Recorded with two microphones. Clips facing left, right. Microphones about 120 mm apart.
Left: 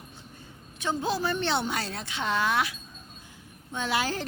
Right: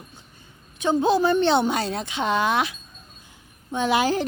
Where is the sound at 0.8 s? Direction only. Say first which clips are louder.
Right 9 dB; 20° right (ahead or behind).